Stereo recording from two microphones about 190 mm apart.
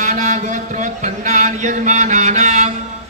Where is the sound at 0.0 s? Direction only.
40° right (ahead or behind).